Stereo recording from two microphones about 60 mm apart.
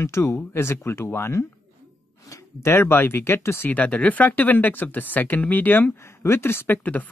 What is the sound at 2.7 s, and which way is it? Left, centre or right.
Speech, left.